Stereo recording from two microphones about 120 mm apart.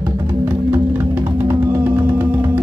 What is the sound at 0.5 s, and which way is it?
Music, 20° right (ahead or behind).